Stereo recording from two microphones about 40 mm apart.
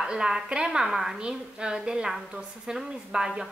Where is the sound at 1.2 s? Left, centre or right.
Right.